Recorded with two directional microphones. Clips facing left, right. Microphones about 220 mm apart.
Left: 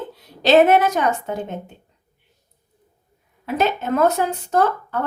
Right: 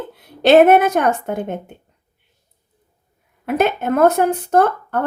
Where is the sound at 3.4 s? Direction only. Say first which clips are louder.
Right 3 dB; 55° right (ahead or behind).